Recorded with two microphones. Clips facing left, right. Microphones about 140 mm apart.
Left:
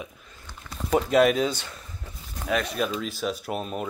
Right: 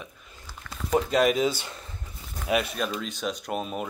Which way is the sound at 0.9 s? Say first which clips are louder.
Left 2 dB; centre (ahead or behind).